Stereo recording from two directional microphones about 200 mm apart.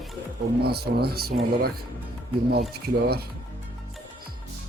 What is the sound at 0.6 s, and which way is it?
Speech, 50° right (ahead or behind).